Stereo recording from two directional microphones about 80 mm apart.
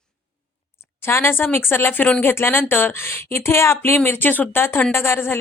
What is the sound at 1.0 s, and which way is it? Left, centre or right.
Speech, left.